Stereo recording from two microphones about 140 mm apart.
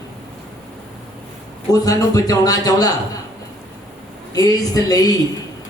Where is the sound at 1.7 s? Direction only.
25° left (ahead or behind).